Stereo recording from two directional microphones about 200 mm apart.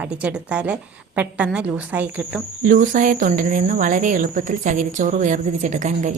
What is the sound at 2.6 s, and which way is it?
Speech, 40° right (ahead or behind).